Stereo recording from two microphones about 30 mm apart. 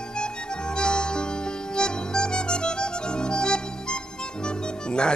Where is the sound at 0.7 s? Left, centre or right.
Left.